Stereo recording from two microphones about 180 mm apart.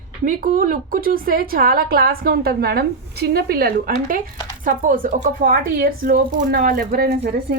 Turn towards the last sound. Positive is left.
turn(degrees=-55)  # may be behind; listen again after turning